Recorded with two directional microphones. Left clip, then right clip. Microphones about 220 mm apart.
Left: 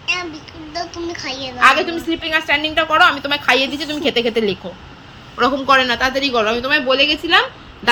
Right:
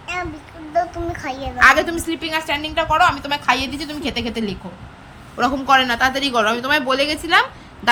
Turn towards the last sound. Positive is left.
turn(degrees=-5)  # may be behind; listen again after turning